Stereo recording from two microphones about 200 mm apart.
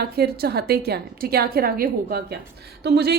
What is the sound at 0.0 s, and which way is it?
A woman's voice, 55° right (ahead or behind).